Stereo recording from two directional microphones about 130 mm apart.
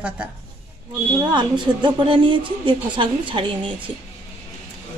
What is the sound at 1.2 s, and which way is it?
A woman's voice, 35° right (ahead or behind).